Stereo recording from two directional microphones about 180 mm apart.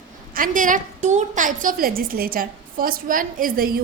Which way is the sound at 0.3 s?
50° right (ahead or behind).